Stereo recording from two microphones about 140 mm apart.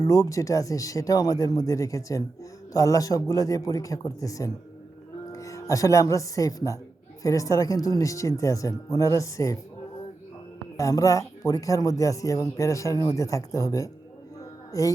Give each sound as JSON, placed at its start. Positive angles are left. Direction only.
{"t": 0.0, "sound": "speech", "side_deg": 20}
{"t": 10.8, "sound": "speech", "side_deg": 25}
{"t": 14.7, "sound": "music", "side_deg": 25}